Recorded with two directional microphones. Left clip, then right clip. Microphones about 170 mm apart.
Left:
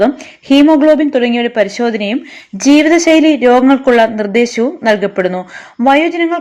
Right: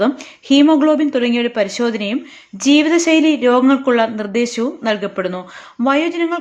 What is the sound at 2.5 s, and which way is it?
Speech, 25° left (ahead or behind).